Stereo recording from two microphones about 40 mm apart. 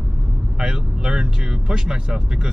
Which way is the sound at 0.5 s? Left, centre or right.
Right.